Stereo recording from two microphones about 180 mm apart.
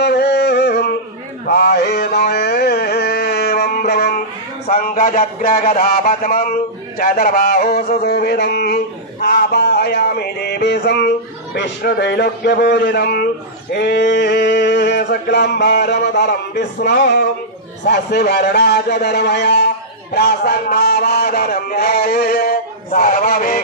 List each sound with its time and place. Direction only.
0.0 s a sound: 65° left (ahead or behind)
1.5 s mantra: 60° left (ahead or behind)
4.6 s a man's voice: 50° left (ahead or behind)
13.7 s a man's voice: 75° left (ahead or behind); by 23.6 s 50° left (ahead or behind)